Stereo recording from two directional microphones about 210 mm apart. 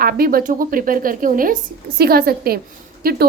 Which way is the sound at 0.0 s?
45° right (ahead or behind).